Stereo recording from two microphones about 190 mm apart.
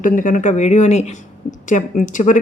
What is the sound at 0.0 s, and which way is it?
A woman's voice, 45° left (ahead or behind).